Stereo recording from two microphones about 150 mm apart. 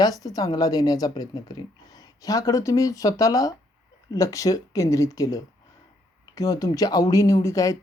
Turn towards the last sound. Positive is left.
turn(degrees=20)  # may be behind; listen again after turning